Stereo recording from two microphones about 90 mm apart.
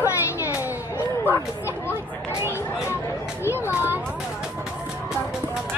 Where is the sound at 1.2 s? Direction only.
25° left (ahead or behind).